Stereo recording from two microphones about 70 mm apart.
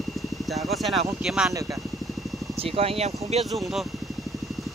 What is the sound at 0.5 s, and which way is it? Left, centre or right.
Speech, centre.